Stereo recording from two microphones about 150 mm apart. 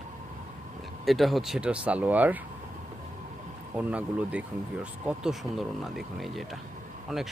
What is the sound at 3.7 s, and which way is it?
Speech, 10° right (ahead or behind).